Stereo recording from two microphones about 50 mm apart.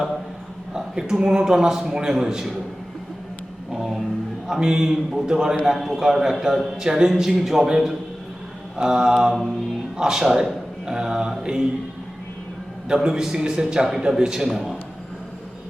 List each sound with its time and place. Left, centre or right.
0.7 s a man's voice: centre
3.7 s a sound: centre
4.4 s a man's voice: centre
5.6 s a man's voice: centre
9.2 s a man's voice: centre
12.9 s a man's voice: centre